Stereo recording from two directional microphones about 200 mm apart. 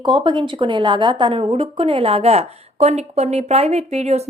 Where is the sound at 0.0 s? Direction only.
25° right (ahead or behind).